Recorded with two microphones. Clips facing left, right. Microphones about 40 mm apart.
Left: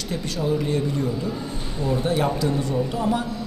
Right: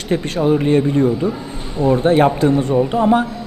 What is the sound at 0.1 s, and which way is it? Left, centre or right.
A man's voice, right.